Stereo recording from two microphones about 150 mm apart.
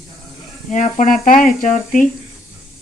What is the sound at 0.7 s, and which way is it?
Speech, 55° left (ahead or behind).